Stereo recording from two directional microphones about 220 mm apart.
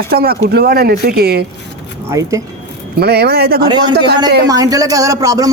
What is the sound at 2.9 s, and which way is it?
Speech, 45° right (ahead or behind).